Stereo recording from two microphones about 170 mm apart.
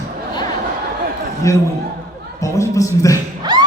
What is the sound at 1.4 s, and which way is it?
A man's voice, 15° left (ahead or behind).